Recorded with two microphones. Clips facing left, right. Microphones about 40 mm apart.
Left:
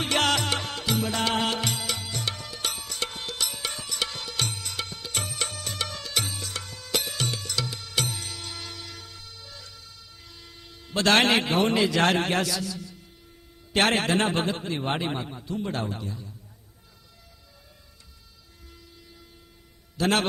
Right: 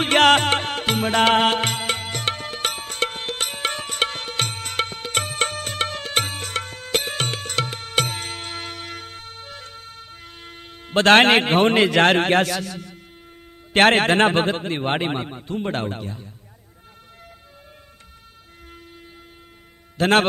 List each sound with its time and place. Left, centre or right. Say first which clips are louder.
0.0 s music: right 9 dB; right
13.7 s a man's voice: right 7 dB; right
20.0 s a man's voice: right 7 dB; right